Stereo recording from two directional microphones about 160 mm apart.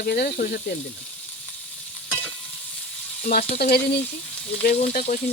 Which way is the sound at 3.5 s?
75° left (ahead or behind).